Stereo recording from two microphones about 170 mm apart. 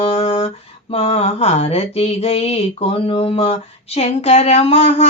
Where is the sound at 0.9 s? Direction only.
35° left (ahead or behind).